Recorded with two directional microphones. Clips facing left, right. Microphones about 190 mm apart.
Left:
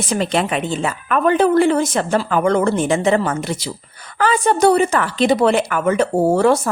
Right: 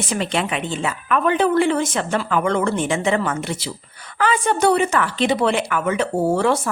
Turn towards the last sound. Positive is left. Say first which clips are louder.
# left 4 dB
turn(degrees=40)  # may be behind; listen again after turning